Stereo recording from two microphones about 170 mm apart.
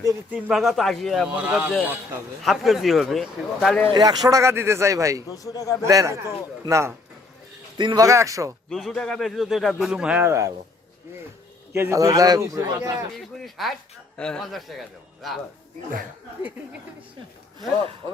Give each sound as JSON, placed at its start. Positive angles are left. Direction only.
{"t": 0.0, "sound": "a man's voice", "side_deg": -10}
{"t": 3.9, "sound": "a man's voice", "side_deg": -25}
{"t": 5.3, "sound": "a man's voice", "side_deg": 20}
{"t": 5.8, "sound": "a man's voice", "side_deg": -20}
{"t": 8.7, "sound": "a man's voice", "side_deg": 0}
{"t": 11.7, "sound": "a man's voice", "side_deg": -15}
{"t": 13.4, "sound": "a man's voice", "side_deg": 0}